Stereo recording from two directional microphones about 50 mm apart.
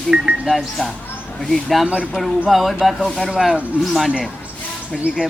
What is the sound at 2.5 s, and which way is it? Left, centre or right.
Speech, centre.